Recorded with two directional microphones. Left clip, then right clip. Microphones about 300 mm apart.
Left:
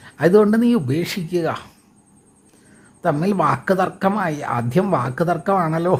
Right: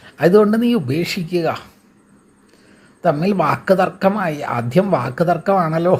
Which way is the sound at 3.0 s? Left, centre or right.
Centre.